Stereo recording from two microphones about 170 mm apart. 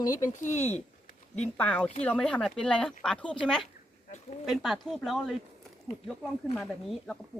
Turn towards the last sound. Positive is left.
turn(degrees=0)  # may be behind; listen again after turning